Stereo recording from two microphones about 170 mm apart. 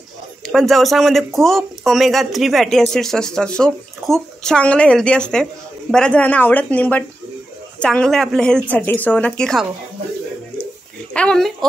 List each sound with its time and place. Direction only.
0.5 s speech: centre (ahead or behind)
11.1 s speech: 5° left (ahead or behind)